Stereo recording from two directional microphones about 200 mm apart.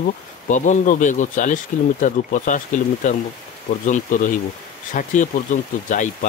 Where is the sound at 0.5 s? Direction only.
40° left (ahead or behind).